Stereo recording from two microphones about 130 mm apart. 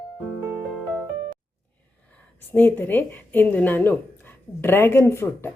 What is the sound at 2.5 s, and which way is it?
A woman's voice, 15° left (ahead or behind).